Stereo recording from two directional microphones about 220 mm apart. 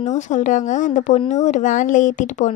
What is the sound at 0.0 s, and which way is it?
A woman's voice, 35° left (ahead or behind).